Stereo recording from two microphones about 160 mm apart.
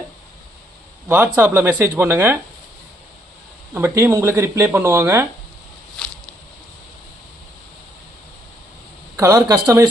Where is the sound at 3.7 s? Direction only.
15° right (ahead or behind).